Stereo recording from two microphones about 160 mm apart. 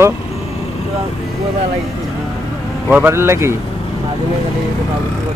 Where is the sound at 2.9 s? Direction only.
15° right (ahead or behind).